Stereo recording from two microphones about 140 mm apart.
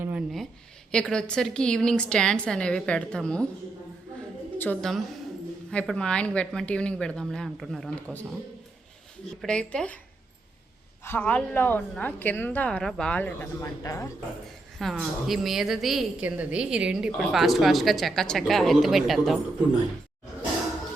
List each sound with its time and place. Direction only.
0.0 s a sound: 10° right (ahead or behind)
0.9 s a woman's voice: 5° left (ahead or behind)
4.5 s a sound: 15° left (ahead or behind)
4.8 s a woman's voice: centre (ahead or behind)
9.4 s a woman's voice: 5° left (ahead or behind)
11.0 s a woman's voice: 15° left (ahead or behind)
14.9 s a woman's voice: centre (ahead or behind)